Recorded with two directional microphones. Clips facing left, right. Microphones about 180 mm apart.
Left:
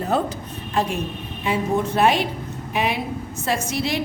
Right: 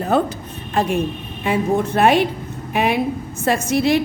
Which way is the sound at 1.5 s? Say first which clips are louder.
Right 3 dB; 55° right (ahead or behind).